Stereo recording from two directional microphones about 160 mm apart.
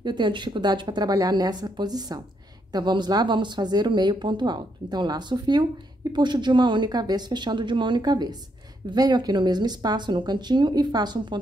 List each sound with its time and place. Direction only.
0.0 s speech: 30° right (ahead or behind)